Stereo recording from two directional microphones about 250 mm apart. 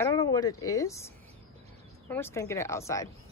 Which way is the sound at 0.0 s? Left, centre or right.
Centre.